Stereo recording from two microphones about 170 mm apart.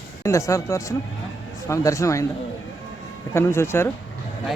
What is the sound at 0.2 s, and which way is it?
Speech, 15° left (ahead or behind).